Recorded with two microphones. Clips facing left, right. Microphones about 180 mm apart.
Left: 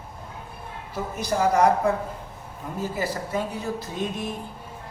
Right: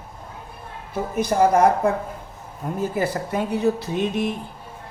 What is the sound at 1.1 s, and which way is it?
Speech, 50° right (ahead or behind).